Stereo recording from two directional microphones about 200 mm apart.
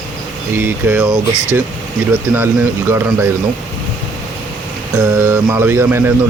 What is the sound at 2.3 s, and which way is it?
Speech, 10° right (ahead or behind).